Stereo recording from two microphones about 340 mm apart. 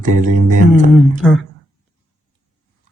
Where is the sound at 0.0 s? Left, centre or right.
Right.